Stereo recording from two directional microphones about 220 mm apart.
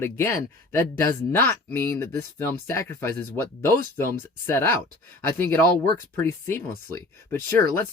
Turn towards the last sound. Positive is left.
turn(degrees=10)  # may be behind; listen again after turning